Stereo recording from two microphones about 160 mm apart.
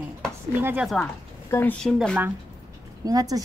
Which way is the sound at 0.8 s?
5° left (ahead or behind).